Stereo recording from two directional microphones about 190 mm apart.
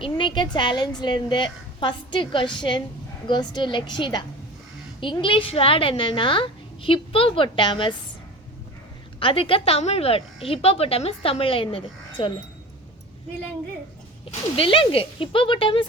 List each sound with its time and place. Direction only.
0.0 s speech: 25° left (ahead or behind)
9.2 s speech: 30° left (ahead or behind)
14.3 s speech: 30° left (ahead or behind)